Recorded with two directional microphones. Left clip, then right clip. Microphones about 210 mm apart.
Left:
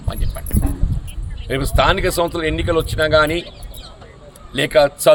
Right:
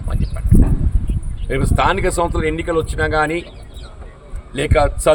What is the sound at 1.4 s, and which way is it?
A man's voice, centre (ahead or behind).